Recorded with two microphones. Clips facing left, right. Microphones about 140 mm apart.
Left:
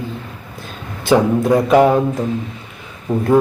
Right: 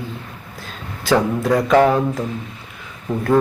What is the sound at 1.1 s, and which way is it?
Mantra, 20° left (ahead or behind).